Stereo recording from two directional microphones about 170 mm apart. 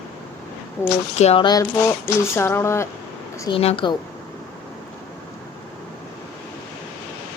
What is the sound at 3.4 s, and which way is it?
Speech, 35° left (ahead or behind).